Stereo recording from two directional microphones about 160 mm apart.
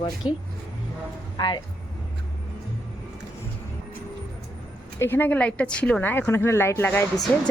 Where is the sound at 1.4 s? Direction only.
30° left (ahead or behind).